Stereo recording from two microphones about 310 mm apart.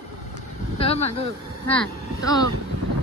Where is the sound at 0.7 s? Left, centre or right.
Centre.